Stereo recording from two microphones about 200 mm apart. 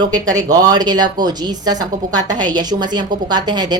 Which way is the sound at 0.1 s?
20° right (ahead or behind).